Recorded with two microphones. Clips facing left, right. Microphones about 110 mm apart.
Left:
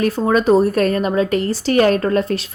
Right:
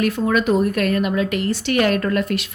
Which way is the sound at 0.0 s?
35° left (ahead or behind).